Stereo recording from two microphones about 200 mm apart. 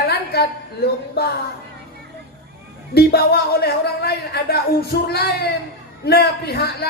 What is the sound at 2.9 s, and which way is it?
A man's voice, 50° left (ahead or behind).